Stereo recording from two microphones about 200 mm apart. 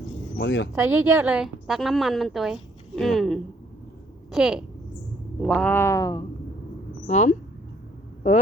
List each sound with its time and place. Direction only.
0.3 s speech: 60° left (ahead or behind)
0.8 s a woman's voice: 10° right (ahead or behind); by 6.2 s 20° left (ahead or behind)
7.1 s speech: 35° left (ahead or behind)